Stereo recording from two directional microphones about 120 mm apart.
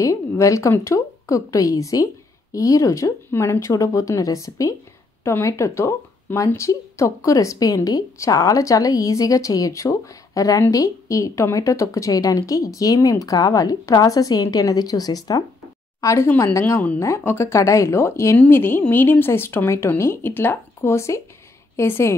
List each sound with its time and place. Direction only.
0.0 s a woman's voice: 25° left (ahead or behind)